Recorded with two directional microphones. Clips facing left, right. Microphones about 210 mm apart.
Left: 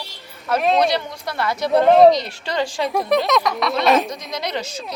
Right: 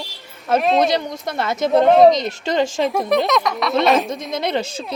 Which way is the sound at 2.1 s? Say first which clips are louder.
Right 3 dB; 20° right (ahead or behind).